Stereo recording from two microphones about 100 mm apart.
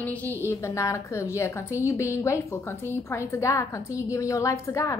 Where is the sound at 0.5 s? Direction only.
30° left (ahead or behind).